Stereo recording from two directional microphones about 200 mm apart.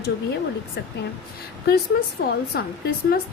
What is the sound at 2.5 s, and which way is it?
Speech, 50° left (ahead or behind).